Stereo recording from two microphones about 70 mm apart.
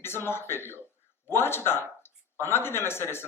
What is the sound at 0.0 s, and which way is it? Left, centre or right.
Speech, left.